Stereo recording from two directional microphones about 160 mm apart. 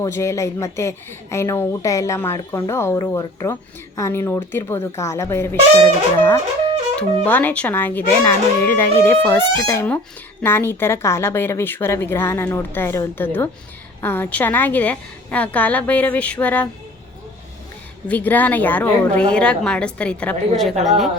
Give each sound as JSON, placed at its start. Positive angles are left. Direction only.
{"t": 0.0, "sound": "speech", "side_deg": 20}
{"t": 18.1, "sound": "speech", "side_deg": 10}